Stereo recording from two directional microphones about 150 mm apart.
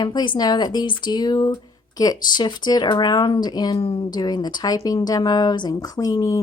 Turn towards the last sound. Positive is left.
turn(degrees=20)  # may be behind; listen again after turning